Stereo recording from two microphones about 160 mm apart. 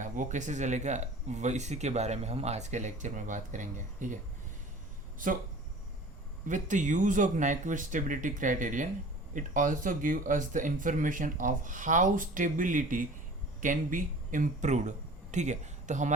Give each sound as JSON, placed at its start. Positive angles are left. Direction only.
{"t": 0.0, "sound": "speech", "side_deg": -50}
{"t": 5.2, "sound": "speech", "side_deg": -55}
{"t": 6.5, "sound": "speech", "side_deg": -50}